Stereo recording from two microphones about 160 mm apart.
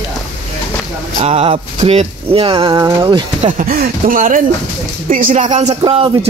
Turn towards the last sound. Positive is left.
turn(degrees=-35)  # may be behind; listen again after turning